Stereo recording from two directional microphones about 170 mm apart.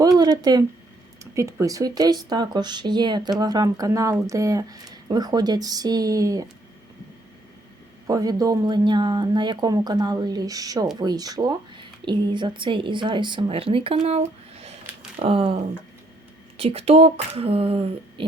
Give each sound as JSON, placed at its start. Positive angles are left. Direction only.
{"t": 0.0, "sound": "speech", "side_deg": -20}
{"t": 8.0, "sound": "speech", "side_deg": -20}